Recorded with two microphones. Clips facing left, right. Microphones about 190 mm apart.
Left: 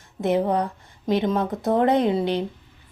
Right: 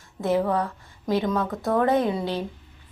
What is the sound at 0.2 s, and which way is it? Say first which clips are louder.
A woman's voice: left 2 dB; 20° left (ahead or behind).